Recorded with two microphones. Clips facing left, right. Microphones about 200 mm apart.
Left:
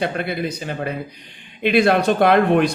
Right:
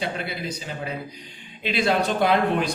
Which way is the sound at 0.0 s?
55° left (ahead or behind).